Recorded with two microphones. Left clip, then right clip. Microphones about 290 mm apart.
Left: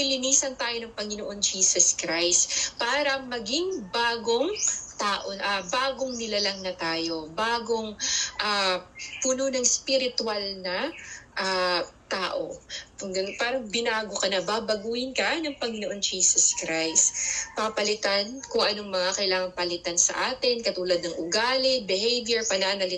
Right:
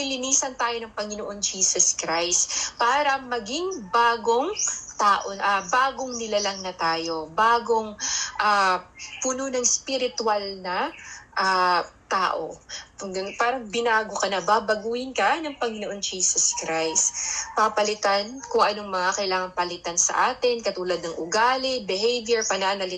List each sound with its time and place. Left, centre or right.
0.0 s a woman's voice: centre